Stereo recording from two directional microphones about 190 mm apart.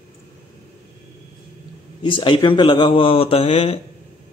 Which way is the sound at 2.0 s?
25° left (ahead or behind).